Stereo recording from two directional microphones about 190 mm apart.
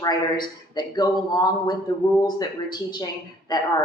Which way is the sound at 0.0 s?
20° left (ahead or behind).